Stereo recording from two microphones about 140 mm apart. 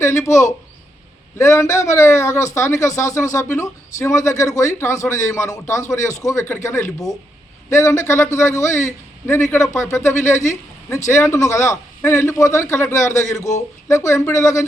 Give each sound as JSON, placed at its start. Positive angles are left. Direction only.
{"t": 0.0, "sound": "speech", "side_deg": 20}